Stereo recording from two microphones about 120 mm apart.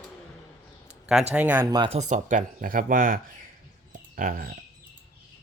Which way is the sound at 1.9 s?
90° right.